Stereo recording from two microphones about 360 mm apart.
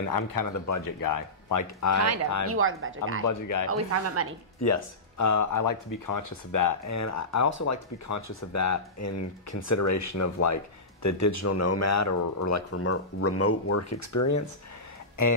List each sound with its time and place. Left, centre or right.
0.1 s speech: left
2.4 s speech: right
3.3 s speech: left
3.6 s speech: right
4.6 s speech: left